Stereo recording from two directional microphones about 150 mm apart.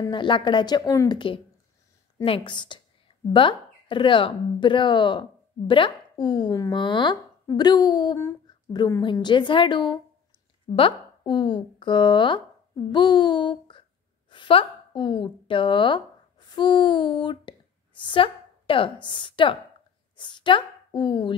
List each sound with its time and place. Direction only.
0.0 s speech: 30° left (ahead or behind)
12.9 s a sound: 30° left (ahead or behind)
14.3 s a woman's voice: 35° left (ahead or behind)